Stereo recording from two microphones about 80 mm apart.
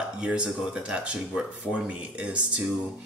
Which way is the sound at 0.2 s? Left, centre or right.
Centre.